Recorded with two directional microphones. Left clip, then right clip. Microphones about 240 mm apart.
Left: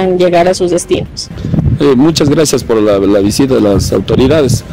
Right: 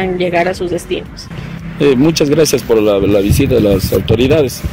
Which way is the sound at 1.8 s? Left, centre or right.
Left.